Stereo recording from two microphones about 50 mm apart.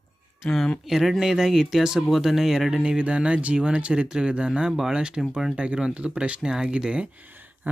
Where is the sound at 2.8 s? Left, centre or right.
Right.